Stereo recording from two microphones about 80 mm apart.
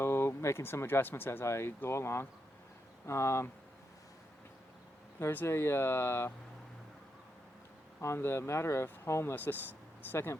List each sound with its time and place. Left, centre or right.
0.0 s speech: left
5.3 s speech: left
8.0 s speech: left